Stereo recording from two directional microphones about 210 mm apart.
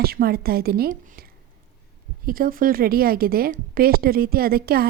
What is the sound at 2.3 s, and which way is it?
A woman's voice, 40° right (ahead or behind).